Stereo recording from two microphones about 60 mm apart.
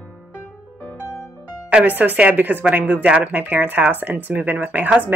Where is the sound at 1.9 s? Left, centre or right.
Right.